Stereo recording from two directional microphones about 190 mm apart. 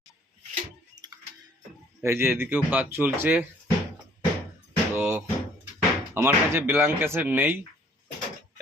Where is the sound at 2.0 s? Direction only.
10° right (ahead or behind).